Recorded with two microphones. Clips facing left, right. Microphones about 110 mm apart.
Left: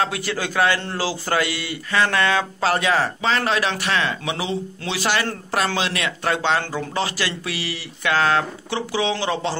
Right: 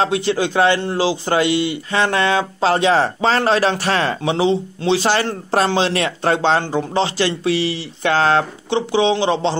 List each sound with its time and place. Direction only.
0.0 s a man's voice: 25° right (ahead or behind)